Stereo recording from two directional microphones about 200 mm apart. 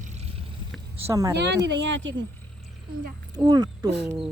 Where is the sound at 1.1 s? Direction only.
15° right (ahead or behind).